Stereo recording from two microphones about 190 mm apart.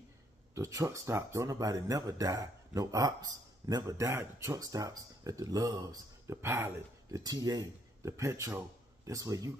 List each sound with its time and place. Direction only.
0.6 s speech: 15° right (ahead or behind)